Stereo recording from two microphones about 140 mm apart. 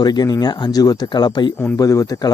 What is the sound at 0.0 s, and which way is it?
Speech, 30° left (ahead or behind).